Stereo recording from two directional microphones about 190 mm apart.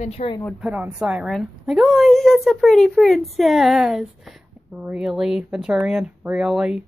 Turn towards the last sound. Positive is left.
turn(degrees=-5)  # may be behind; listen again after turning